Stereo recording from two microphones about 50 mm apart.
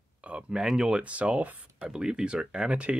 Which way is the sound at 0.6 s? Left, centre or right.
Centre.